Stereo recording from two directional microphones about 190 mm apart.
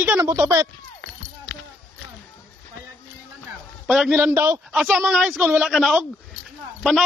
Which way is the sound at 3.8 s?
5° right (ahead or behind).